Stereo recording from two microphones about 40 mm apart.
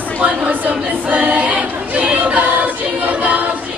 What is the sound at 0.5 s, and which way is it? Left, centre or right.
Chatter, right.